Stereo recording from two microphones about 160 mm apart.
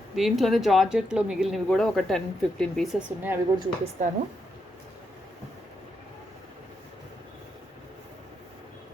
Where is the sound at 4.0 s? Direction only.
50° right (ahead or behind).